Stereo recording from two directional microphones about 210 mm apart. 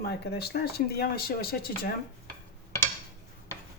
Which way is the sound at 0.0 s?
50° left (ahead or behind).